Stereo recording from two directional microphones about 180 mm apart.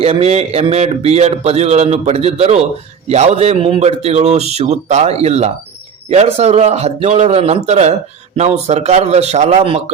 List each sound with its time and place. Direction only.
0.0 s speech: 35° right (ahead or behind)